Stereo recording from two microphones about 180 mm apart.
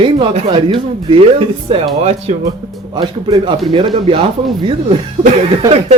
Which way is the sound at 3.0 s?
25° right (ahead or behind).